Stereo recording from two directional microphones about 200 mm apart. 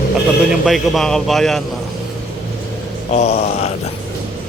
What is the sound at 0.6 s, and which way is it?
A man's voice, centre (ahead or behind).